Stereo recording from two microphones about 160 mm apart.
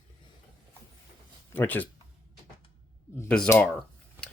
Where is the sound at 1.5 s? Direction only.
10° left (ahead or behind).